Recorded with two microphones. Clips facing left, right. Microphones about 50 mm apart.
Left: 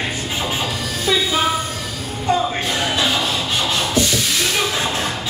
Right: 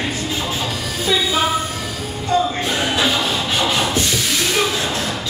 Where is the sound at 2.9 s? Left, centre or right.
Centre.